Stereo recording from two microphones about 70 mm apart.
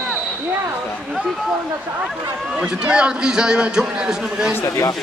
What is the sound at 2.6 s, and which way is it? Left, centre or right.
A man's voice, centre.